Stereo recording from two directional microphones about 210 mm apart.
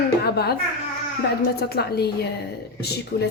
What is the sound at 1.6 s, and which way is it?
Speech, 50° left (ahead or behind).